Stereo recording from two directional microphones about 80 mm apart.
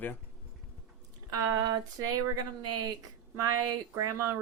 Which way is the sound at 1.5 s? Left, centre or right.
Right.